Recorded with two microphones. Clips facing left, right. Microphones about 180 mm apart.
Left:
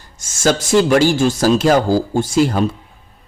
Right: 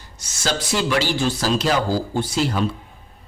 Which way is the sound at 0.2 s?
45° left (ahead or behind).